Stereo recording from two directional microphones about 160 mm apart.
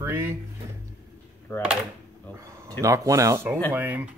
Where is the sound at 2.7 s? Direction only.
20° right (ahead or behind).